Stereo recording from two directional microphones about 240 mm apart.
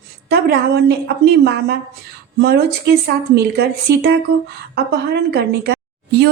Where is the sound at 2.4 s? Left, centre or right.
Right.